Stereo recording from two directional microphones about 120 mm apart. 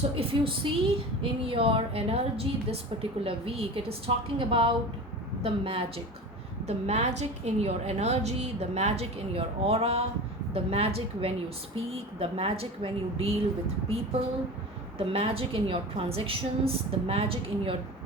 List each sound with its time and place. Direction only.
0.2 s a woman's voice: 50° right (ahead or behind)
6.7 s a woman's voice: 60° right (ahead or behind)
14.9 s a woman's voice: 55° right (ahead or behind)